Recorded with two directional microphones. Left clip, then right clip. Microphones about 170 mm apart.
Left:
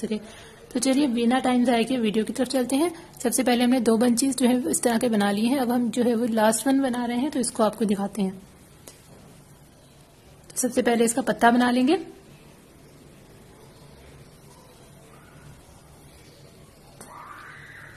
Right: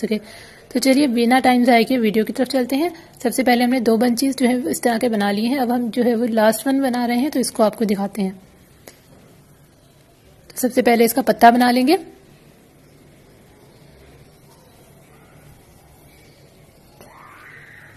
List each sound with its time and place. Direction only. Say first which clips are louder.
0.0 s a woman's voice: right 7 dB; 20° right (ahead or behind)
10.5 s a woman's voice: right 7 dB; 15° right (ahead or behind)